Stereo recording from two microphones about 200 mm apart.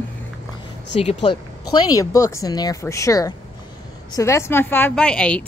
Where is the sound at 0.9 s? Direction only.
30° left (ahead or behind).